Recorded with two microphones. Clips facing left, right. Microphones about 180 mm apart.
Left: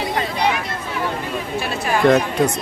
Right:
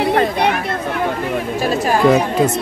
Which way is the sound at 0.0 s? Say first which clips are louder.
Right 6 dB; 60° right (ahead or behind).